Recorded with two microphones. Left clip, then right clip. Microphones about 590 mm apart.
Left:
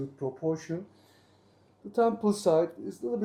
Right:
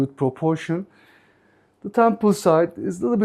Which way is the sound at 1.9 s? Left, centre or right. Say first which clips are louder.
Right 9 dB; right.